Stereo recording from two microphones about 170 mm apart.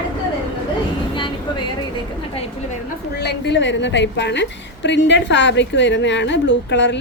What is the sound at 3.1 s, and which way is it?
A woman's voice, 85° left.